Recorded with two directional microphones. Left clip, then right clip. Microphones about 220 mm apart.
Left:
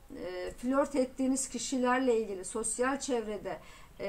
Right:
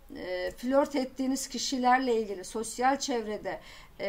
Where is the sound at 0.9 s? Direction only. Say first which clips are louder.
Even; 35° right (ahead or behind).